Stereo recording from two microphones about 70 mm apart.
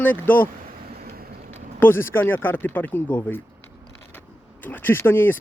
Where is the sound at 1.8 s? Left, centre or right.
Left.